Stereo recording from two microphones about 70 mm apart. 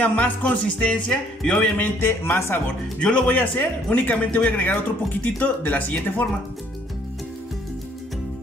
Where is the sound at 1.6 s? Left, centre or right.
Left.